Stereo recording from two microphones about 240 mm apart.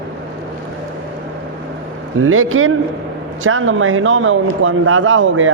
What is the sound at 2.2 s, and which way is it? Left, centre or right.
A man's voice, right.